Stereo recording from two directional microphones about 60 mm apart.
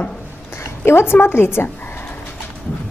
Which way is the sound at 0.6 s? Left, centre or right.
Left.